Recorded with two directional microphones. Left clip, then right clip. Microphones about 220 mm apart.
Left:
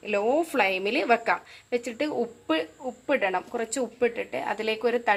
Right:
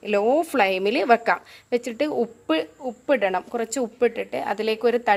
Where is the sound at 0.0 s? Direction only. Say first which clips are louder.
Right 4 dB; 60° right (ahead or behind).